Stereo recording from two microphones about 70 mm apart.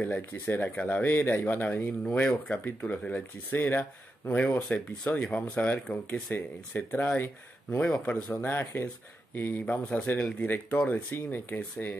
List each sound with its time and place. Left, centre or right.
0.0 s speech: left
0.7 s speech: centre
4.6 s speech: centre
5.3 s speech: left